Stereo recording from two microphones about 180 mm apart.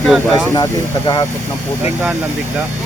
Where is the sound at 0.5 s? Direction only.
20° left (ahead or behind).